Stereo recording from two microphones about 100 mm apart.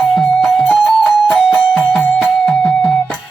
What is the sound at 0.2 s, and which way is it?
Music, 5° left (ahead or behind).